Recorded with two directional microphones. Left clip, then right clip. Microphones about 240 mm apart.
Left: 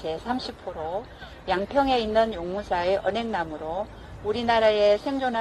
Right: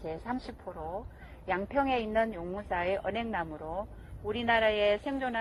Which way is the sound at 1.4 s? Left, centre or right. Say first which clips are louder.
Left 7 dB; centre.